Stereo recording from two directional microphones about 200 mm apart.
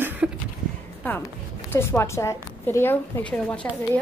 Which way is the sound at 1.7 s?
10° left (ahead or behind).